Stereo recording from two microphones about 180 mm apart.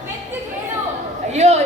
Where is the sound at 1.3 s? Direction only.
40° right (ahead or behind).